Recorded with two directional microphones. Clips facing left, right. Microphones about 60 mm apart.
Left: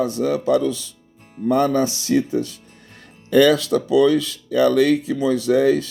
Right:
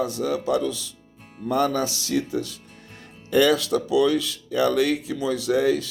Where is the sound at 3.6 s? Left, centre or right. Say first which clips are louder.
Left 4 dB; left.